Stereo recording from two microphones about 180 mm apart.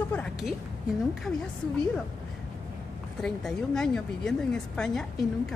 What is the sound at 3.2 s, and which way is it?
A woman's voice, 5° left (ahead or behind).